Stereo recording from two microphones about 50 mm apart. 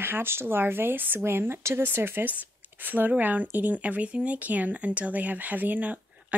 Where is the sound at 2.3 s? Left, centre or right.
Right.